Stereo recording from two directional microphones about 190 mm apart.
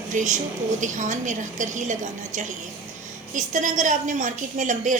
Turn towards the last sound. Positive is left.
turn(degrees=-40)  # may be behind; listen again after turning